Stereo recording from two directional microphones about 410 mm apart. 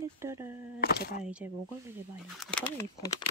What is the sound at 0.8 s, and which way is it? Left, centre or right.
Speech, left.